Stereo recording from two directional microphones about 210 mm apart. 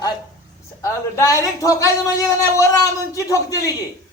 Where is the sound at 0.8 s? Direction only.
15° left (ahead or behind).